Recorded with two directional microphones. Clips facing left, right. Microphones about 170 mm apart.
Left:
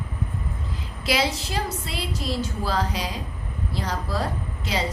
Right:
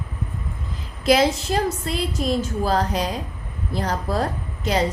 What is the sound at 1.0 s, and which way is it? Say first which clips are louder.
A woman's voice: right 7 dB; 50° right (ahead or behind).